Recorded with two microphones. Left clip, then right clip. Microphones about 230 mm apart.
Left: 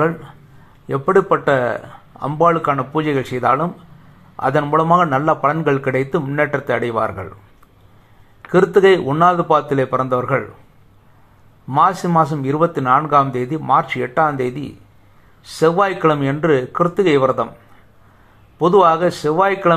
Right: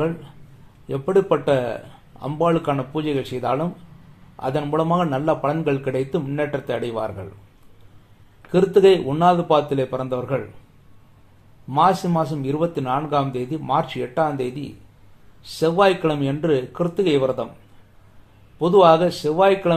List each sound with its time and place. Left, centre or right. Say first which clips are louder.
0.8 s speech: left 4 dB; centre
8.5 s speech: left 3 dB; centre
11.7 s a man's voice: left 4 dB; centre
18.6 s speech: left 2 dB; centre